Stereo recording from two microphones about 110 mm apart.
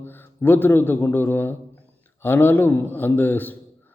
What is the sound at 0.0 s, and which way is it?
A man's voice, 20° left (ahead or behind).